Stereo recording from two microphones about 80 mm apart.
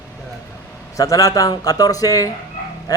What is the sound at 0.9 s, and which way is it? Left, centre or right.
Speech, left.